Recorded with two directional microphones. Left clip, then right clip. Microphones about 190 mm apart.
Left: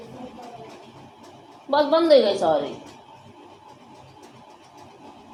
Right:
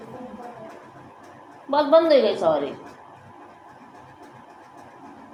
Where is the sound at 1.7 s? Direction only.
20° left (ahead or behind).